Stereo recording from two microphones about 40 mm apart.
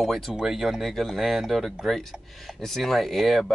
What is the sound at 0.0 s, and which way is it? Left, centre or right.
Speech, centre.